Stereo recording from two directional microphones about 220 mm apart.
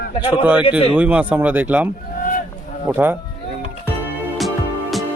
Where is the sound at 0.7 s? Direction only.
25° left (ahead or behind).